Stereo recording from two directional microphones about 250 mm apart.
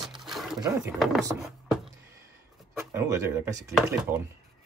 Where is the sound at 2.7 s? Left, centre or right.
Centre.